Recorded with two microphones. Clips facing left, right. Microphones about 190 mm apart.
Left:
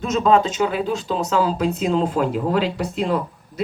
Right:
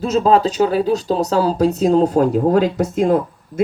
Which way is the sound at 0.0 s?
35° right (ahead or behind).